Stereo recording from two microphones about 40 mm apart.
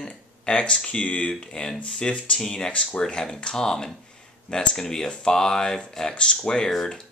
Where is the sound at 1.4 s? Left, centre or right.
Centre.